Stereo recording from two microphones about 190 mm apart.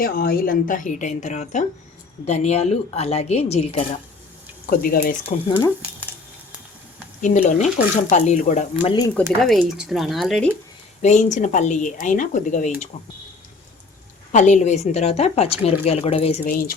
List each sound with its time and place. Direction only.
0.0 s a woman's voice: 50° left (ahead or behind); by 3.8 s 35° left (ahead or behind)
4.6 s a woman's voice: 50° left (ahead or behind)
5.3 s speech: 35° left (ahead or behind)
7.2 s speech: 40° left (ahead or behind)
8.7 s speech: 25° left (ahead or behind)
9.4 s speech: centre (ahead or behind)
11.0 s speech: 40° left (ahead or behind)
14.3 s speech: 40° left (ahead or behind)